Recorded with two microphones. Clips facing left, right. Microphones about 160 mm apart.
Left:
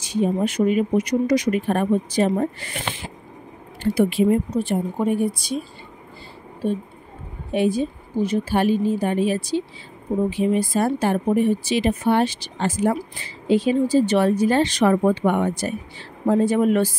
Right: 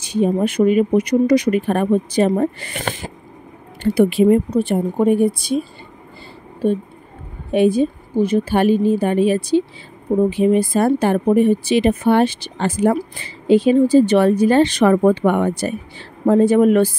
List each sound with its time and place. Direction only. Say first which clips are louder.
0.0 s speech: right 4 dB; 60° right (ahead or behind)
2.8 s a sound: right 5 dB; 45° right (ahead or behind)
3.8 s speech: right 5 dB; 60° right (ahead or behind)
7.5 s speech: right 6 dB; 55° right (ahead or behind)